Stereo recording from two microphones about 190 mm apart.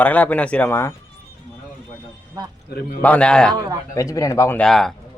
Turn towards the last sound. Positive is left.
turn(degrees=0)  # may be behind; listen again after turning